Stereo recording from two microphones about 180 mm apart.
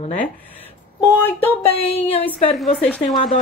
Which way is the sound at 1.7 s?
35° left (ahead or behind).